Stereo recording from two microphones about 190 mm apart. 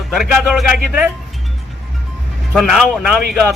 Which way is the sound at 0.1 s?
Centre (ahead or behind).